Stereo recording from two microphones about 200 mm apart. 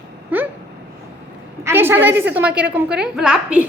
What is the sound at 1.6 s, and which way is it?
A woman's voice, 10° right (ahead or behind).